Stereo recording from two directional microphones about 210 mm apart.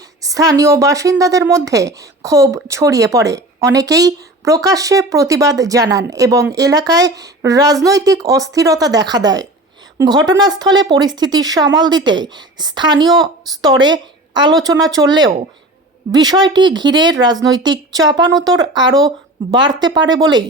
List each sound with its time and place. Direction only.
0.0 s a woman's voice: 15° right (ahead or behind)